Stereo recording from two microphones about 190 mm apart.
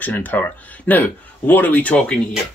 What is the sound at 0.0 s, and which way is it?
Speech, 10° left (ahead or behind).